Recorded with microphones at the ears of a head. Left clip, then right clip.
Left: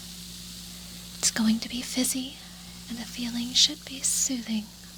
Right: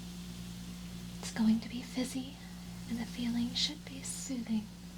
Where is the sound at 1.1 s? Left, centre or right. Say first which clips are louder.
Left 8 dB; left.